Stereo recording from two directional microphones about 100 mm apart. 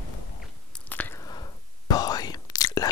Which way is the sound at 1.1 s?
40° left (ahead or behind).